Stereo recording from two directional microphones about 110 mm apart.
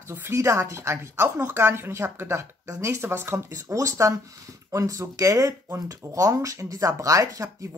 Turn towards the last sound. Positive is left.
turn(degrees=-30)  # may be behind; listen again after turning